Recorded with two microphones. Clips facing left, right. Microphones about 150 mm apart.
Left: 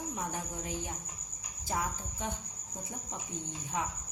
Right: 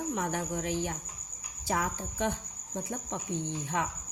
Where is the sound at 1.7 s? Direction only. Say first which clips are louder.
Right 4 dB; 80° right.